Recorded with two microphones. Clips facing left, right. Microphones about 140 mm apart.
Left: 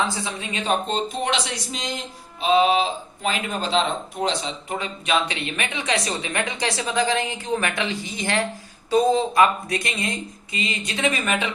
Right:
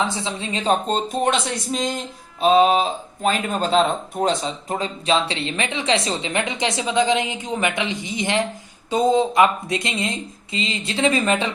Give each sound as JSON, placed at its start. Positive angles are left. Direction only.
{"t": 0.0, "sound": "speech", "side_deg": -20}